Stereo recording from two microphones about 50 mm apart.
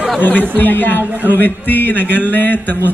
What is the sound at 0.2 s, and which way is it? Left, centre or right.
Speech, left.